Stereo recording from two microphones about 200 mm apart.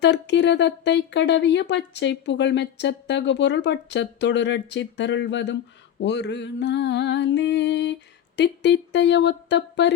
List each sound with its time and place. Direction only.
0.0 s speech: 60° left (ahead or behind)